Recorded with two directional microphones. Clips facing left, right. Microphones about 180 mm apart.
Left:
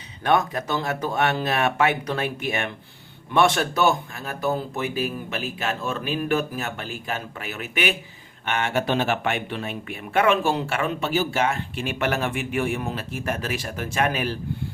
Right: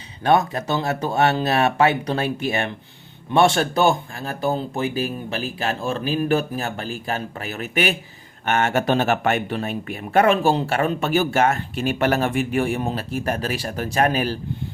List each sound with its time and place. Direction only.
0.3 s speech: 30° right (ahead or behind)